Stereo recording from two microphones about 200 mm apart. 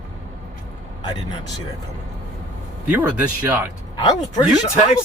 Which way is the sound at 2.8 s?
10° right (ahead or behind).